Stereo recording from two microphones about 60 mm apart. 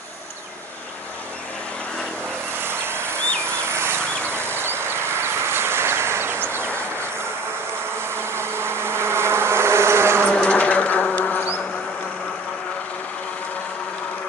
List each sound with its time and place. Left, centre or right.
2.6 s vehicle: right
3.4 s a sound: right
8.1 s insect: right
10.2 s bee: centre